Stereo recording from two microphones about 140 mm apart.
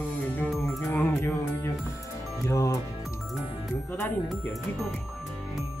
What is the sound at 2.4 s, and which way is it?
Speech, 20° left (ahead or behind).